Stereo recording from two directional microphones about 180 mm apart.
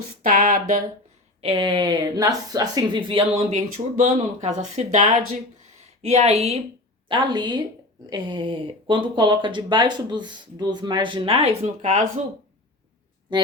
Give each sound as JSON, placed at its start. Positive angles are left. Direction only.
{"t": 0.2, "sound": "a sound", "side_deg": -50}
{"t": 1.4, "sound": "speech", "side_deg": -30}
{"t": 3.5, "sound": "speech", "side_deg": -45}
{"t": 7.1, "sound": "speech", "side_deg": -25}